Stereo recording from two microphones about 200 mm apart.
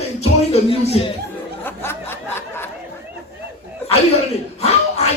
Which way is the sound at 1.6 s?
10° left (ahead or behind).